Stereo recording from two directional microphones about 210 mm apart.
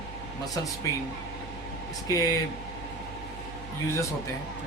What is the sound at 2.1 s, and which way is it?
Speech, 15° left (ahead or behind).